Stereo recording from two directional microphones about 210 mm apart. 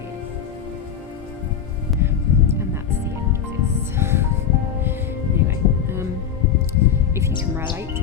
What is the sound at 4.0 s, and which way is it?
Music, 10° right (ahead or behind).